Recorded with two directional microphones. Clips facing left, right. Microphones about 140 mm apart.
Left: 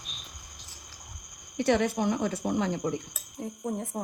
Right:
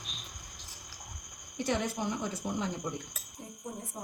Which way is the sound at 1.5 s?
70° left (ahead or behind).